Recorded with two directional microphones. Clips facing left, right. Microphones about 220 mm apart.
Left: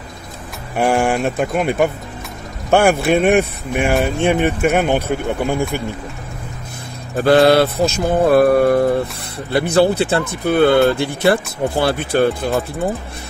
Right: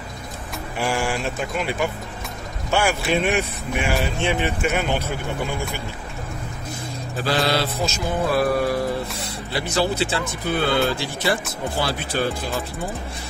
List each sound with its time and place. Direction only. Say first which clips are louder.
0.7 s mantra: left 8 dB; 55° left (ahead or behind)
7.2 s mantra: left 11 dB; 55° left (ahead or behind)